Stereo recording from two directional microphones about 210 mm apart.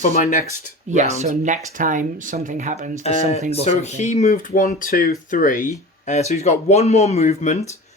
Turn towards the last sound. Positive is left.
turn(degrees=30)  # may be behind; listen again after turning